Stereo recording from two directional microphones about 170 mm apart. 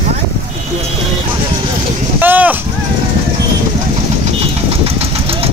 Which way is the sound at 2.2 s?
10° right (ahead or behind).